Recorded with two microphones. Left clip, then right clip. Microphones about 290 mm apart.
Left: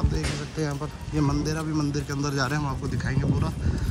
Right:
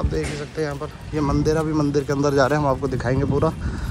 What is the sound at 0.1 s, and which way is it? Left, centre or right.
A man's voice, centre.